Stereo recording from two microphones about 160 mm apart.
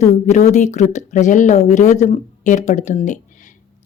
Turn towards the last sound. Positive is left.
turn(degrees=50)  # may be behind; listen again after turning